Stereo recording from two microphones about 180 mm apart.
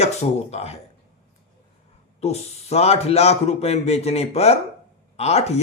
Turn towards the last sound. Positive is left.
turn(degrees=35)  # may be behind; listen again after turning